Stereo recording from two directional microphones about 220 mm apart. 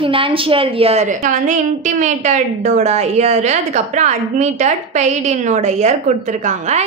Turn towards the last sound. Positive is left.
turn(degrees=-30)  # may be behind; listen again after turning